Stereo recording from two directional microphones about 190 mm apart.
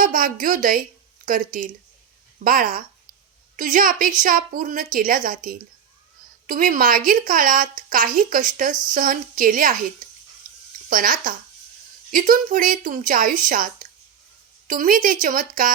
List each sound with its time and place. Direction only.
0.0 s a woman's voice: 45° right (ahead or behind)
10.8 s a woman's voice: 45° right (ahead or behind)